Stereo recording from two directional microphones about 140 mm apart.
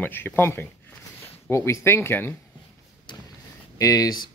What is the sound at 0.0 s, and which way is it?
Speech, 15° left (ahead or behind).